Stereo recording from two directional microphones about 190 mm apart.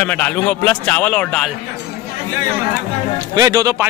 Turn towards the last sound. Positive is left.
turn(degrees=-15)  # may be behind; listen again after turning